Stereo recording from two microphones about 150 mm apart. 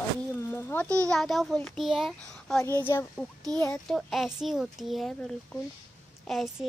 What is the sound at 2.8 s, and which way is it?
Speech, 15° left (ahead or behind).